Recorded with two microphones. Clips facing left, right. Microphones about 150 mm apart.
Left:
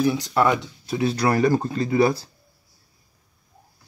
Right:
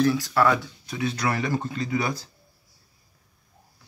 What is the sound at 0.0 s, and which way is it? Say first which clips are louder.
Speech: left 1 dB; 20° left (ahead or behind).